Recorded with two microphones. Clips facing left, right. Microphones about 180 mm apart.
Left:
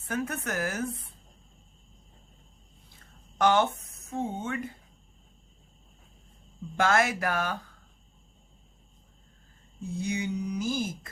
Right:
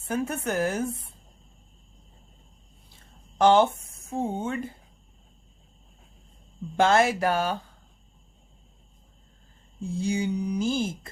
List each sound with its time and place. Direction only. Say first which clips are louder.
0.1 s speech: right 4 dB; 30° right (ahead or behind)
3.3 s speech: right 5 dB; 30° right (ahead or behind)
6.7 s speech: right 4 dB; 30° right (ahead or behind)
9.8 s speech: right 4 dB; 30° right (ahead or behind)